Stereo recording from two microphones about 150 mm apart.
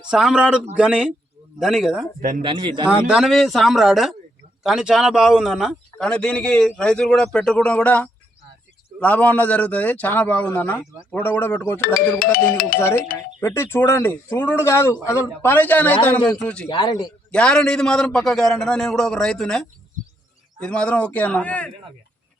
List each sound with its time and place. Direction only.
0.1 s a man's voice: 5° right (ahead or behind)
2.4 s speech: 35° right (ahead or behind)
2.8 s a man's voice: 15° left (ahead or behind)
3.1 s a man's voice: centre (ahead or behind); by 11.8 s 15° left (ahead or behind)
11.9 s music: 75° left (ahead or behind)
13.4 s a man's voice: 15° left (ahead or behind)
16.6 s a man's voice: 30° left (ahead or behind)
17.3 s a man's voice: 5° left (ahead or behind)